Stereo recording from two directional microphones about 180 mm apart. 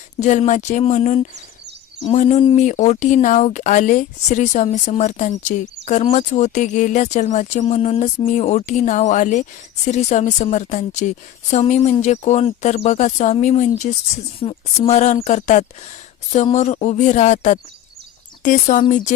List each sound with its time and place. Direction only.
0.2 s speech: 40° left (ahead or behind)
2.6 s speech: 40° left (ahead or behind)